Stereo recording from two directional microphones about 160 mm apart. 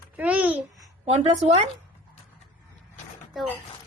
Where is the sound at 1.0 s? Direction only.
40° right (ahead or behind).